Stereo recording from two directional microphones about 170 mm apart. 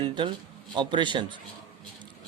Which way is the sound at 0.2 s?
25° right (ahead or behind).